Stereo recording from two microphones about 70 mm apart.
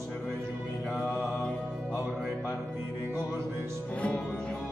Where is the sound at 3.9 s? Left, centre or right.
Centre.